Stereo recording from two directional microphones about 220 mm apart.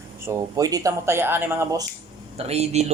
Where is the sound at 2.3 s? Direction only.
30° right (ahead or behind).